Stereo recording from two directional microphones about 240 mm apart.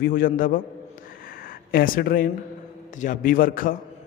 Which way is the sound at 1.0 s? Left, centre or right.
Left.